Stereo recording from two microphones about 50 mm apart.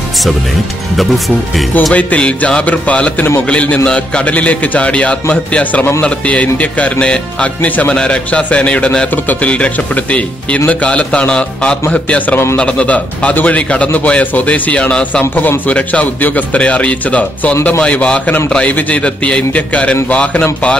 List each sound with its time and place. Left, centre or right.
0.9 s speech: centre
2.0 s speech: left
7.6 s speech: left
7.9 s a man's voice: centre
9.1 s speech: left
9.5 s speech: left